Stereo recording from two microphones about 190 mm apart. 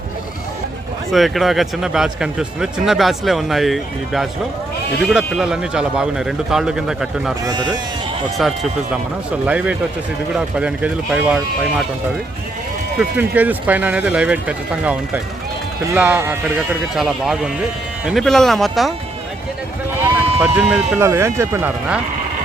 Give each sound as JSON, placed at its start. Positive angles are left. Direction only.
{"t": 1.1, "sound": "speech", "side_deg": 0}
{"t": 7.4, "sound": "speech", "side_deg": -20}
{"t": 8.4, "sound": "speech", "side_deg": 0}
{"t": 13.0, "sound": "speech", "side_deg": -10}
{"t": 20.4, "sound": "speech", "side_deg": -5}